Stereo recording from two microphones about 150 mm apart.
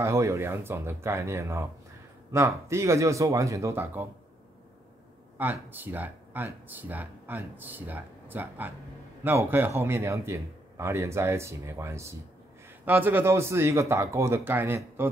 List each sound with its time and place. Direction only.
0.0 s speech: 20° right (ahead or behind)
5.4 s speech: 10° right (ahead or behind)